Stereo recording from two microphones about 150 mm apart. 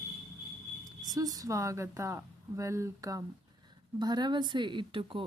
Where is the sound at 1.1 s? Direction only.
25° right (ahead or behind).